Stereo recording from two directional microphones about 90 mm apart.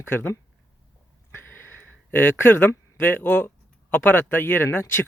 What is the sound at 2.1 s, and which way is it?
Speech, 20° left (ahead or behind).